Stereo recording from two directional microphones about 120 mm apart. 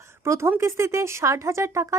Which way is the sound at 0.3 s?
20° right (ahead or behind).